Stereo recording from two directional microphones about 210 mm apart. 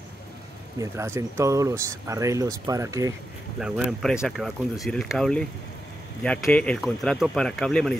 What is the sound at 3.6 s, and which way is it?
Speech, centre (ahead or behind).